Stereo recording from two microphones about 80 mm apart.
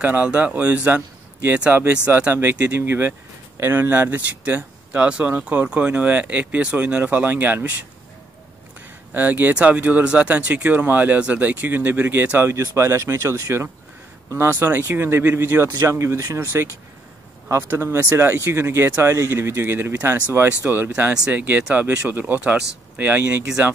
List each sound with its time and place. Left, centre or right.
0.0 s speech: centre
9.1 s speech: right